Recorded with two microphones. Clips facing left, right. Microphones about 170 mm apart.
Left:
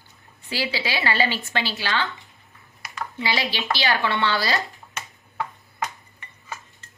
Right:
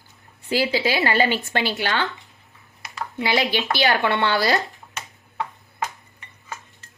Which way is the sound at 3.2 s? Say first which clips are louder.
Right 5 dB; 50° right (ahead or behind).